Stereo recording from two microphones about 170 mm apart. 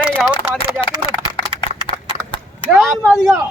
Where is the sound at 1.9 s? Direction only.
30° left (ahead or behind).